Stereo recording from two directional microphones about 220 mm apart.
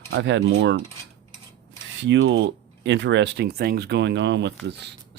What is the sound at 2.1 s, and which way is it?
Speech, 60° right (ahead or behind).